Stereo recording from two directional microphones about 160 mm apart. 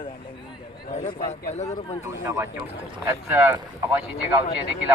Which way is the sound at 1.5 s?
45° left (ahead or behind).